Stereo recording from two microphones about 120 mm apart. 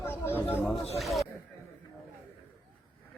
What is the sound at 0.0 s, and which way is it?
Chatter, 20° left (ahead or behind).